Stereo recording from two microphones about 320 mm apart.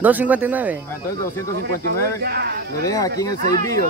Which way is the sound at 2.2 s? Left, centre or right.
Right.